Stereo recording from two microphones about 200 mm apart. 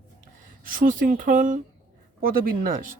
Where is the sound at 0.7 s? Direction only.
45° right (ahead or behind).